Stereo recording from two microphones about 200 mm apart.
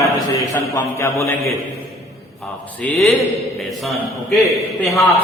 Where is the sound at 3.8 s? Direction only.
Centre (ahead or behind).